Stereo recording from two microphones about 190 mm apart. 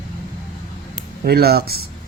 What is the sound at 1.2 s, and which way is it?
Speech, 55° right (ahead or behind).